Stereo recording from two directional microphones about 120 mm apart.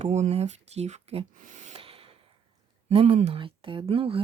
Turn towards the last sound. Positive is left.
turn(degrees=-50)  # may be behind; listen again after turning